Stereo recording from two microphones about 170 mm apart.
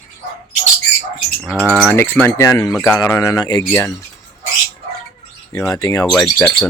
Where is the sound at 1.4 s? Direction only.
Centre (ahead or behind).